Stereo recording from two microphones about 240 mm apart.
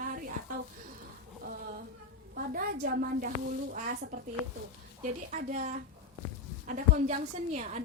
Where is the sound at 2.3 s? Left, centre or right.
Right.